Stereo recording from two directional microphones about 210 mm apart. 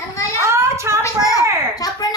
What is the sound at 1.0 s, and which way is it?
Speech, 15° left (ahead or behind).